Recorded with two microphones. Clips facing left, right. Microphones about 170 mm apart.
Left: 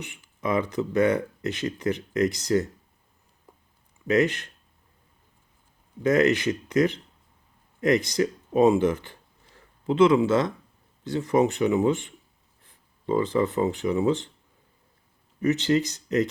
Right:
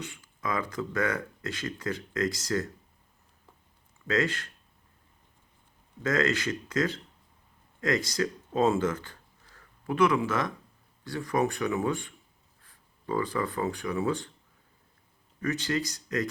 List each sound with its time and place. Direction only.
0.0 s speech: 20° left (ahead or behind)
4.0 s speech: 20° left (ahead or behind)
6.0 s speech: 20° left (ahead or behind)
15.4 s speech: 20° left (ahead or behind)